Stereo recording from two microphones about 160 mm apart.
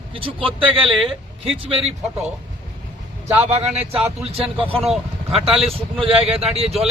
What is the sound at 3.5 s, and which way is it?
Speech, 40° right (ahead or behind).